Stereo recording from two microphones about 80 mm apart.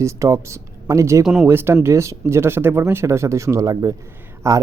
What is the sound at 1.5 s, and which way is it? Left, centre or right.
Speech, right.